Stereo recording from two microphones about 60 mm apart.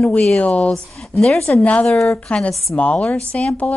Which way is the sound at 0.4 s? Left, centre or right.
Left.